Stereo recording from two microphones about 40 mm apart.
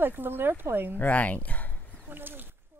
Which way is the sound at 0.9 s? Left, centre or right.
Left.